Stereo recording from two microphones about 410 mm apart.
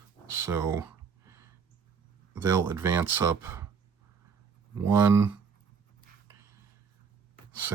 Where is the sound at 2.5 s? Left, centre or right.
Centre.